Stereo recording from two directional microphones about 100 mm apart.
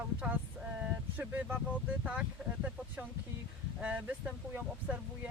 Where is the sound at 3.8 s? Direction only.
15° right (ahead or behind).